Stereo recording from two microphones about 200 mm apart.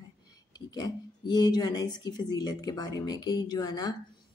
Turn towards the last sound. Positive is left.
turn(degrees=20)  # may be behind; listen again after turning